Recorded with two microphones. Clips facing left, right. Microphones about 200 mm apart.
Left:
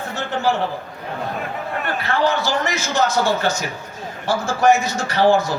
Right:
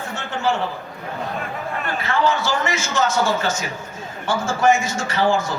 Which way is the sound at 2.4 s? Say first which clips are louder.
Left 1 dB; 35° left (ahead or behind).